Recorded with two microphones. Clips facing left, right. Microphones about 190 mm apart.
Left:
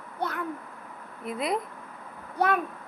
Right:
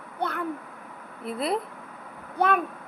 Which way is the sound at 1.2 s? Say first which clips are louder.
Right 1 dB; 30° right (ahead or behind).